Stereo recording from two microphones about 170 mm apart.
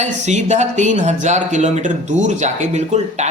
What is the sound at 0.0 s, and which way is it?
Speech, 45° right (ahead or behind).